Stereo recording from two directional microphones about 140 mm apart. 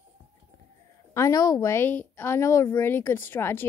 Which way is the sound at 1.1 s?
25° left (ahead or behind).